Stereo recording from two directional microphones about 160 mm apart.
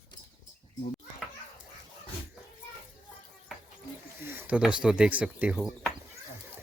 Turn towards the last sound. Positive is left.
turn(degrees=-5)  # may be behind; listen again after turning